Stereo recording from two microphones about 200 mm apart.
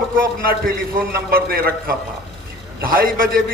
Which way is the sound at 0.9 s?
50° right (ahead or behind).